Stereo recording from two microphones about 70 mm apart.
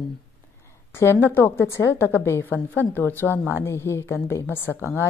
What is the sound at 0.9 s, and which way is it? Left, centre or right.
A woman's voice, left.